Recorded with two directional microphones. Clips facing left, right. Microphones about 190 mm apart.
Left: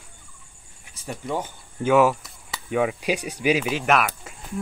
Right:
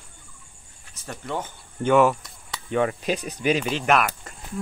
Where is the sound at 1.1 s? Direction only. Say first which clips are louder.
Left 2 dB; 10° left (ahead or behind).